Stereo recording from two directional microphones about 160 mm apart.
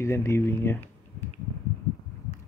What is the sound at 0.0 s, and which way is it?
Speech, 15° left (ahead or behind).